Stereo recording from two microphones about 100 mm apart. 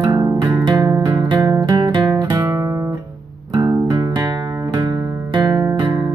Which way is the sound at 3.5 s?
30° right (ahead or behind).